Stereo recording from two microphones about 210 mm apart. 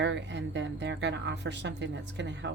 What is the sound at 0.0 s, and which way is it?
Speech, 55° right (ahead or behind).